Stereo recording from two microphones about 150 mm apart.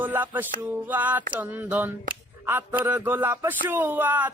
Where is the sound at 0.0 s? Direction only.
10° right (ahead or behind).